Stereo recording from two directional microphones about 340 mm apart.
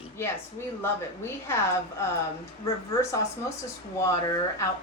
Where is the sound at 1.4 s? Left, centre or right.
Centre.